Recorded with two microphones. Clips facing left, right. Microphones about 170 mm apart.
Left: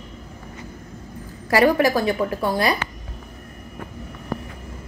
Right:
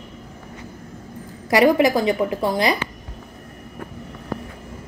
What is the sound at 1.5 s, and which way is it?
A woman's voice, 20° right (ahead or behind).